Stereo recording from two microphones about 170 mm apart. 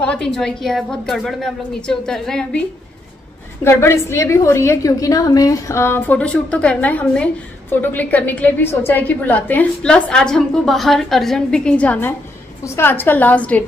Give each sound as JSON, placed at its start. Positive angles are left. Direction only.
{"t": 0.0, "sound": "a woman's voice", "side_deg": 5}
{"t": 3.6, "sound": "a woman's voice", "side_deg": 15}